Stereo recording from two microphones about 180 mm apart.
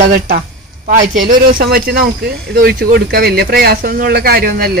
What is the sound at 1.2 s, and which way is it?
Speech, 50° right (ahead or behind).